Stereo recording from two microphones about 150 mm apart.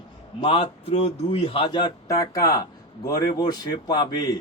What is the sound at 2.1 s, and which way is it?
Speech, 25° left (ahead or behind).